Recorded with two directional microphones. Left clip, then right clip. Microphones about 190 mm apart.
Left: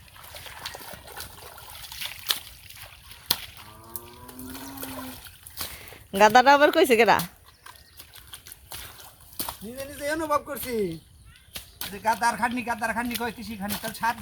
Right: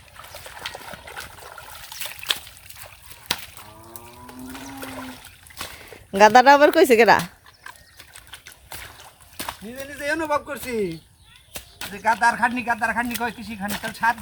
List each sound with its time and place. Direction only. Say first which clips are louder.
0.6 s trickle: right 6 dB; centre (ahead or behind)
2.6 s splash: right 2 dB; 45° right (ahead or behind)
3.4 s a sound: right 1 dB; 50° right (ahead or behind)
4.5 s water: right 3 dB; 5° left (ahead or behind)
5.5 s speech: right 2 dB; centre (ahead or behind)
7.6 s dog: right 5 dB; 5° left (ahead or behind)
9.0 s a sound: right 3 dB; centre (ahead or behind)
10.7 s speech: right 2 dB; centre (ahead or behind)